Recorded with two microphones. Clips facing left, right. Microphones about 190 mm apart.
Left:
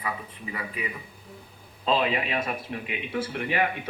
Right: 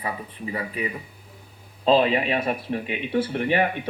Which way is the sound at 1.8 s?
30° right (ahead or behind).